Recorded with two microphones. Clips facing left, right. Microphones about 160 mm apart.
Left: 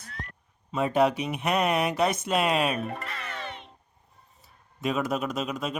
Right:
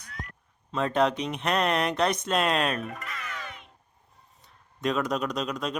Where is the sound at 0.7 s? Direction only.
10° left (ahead or behind).